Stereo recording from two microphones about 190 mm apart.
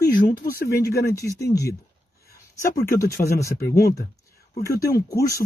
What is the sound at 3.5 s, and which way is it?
Speech, 55° left (ahead or behind).